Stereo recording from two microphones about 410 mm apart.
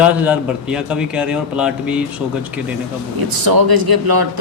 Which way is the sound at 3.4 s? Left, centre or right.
Right.